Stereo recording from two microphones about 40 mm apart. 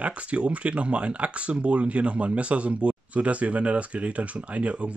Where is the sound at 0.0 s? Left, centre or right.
Right.